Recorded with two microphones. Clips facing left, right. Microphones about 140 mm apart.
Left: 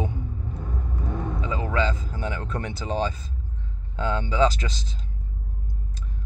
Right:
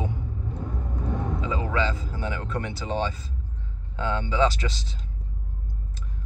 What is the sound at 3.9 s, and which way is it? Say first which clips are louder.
Speech: left 1 dB; 35° left (ahead or behind).